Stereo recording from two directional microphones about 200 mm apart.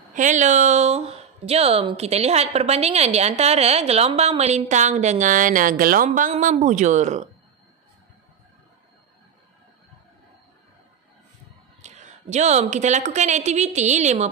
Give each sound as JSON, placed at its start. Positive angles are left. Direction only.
{"t": 0.1, "sound": "a woman's voice", "side_deg": -40}
{"t": 11.8, "sound": "speech", "side_deg": -35}